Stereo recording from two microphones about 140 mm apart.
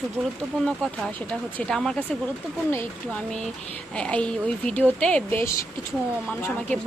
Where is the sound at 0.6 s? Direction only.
Centre (ahead or behind).